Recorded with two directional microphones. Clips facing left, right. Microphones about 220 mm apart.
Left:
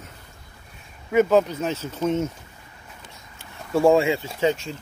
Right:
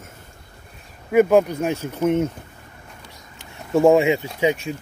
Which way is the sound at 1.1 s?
10° right (ahead or behind).